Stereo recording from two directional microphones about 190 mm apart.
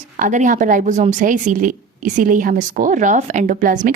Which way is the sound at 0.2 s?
40° right (ahead or behind).